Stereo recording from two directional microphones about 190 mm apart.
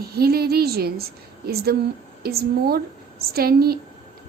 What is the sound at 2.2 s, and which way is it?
A woman's voice, 55° right (ahead or behind).